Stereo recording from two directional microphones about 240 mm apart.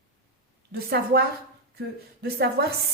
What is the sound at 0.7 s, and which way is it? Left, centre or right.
A woman's voice, right.